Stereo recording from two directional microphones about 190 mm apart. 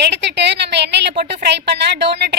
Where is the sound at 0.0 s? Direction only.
65° right (ahead or behind).